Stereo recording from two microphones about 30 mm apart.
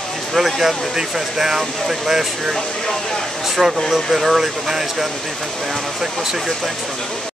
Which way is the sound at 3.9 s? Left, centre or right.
Centre.